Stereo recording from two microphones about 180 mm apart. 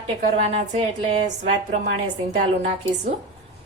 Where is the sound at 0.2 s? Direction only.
40° right (ahead or behind).